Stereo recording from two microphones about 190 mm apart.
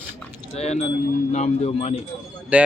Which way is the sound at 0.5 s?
35° left (ahead or behind).